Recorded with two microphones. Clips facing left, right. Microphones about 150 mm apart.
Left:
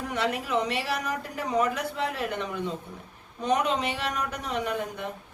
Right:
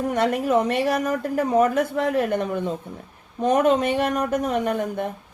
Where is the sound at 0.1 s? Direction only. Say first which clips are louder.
Right 6 dB; 50° right (ahead or behind).